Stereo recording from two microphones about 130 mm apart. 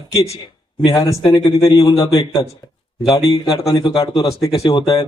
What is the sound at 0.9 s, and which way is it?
Speech, 40° left (ahead or behind).